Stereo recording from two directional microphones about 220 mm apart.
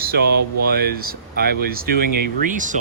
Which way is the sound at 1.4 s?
45° right (ahead or behind).